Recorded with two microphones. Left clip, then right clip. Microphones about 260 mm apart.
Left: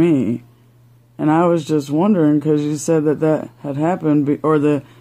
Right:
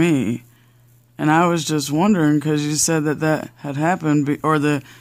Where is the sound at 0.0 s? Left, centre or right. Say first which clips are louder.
Left 3 dB; right.